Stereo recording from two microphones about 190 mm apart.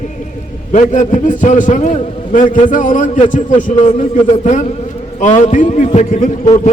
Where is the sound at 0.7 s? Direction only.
40° left (ahead or behind).